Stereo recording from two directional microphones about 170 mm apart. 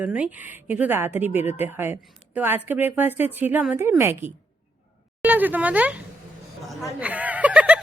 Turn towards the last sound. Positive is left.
turn(degrees=-10)  # may be behind; listen again after turning